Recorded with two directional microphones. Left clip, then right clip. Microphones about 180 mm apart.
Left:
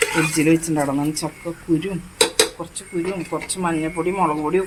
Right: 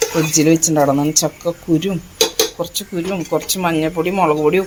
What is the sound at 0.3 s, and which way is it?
Speech, 30° right (ahead or behind).